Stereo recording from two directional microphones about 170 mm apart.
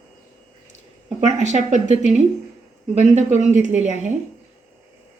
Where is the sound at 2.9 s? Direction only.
40° right (ahead or behind).